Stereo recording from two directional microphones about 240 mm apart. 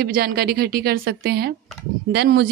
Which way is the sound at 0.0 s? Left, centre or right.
Right.